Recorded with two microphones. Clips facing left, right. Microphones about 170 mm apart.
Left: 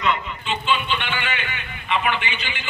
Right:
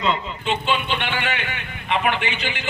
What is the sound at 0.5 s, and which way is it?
A man's voice, 60° right (ahead or behind).